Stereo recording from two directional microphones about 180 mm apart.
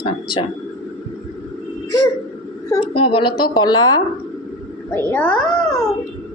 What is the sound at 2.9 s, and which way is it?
A woman's voice, 30° left (ahead or behind).